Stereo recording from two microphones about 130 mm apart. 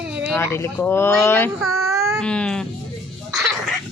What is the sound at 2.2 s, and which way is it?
Baby cry, 5° left (ahead or behind).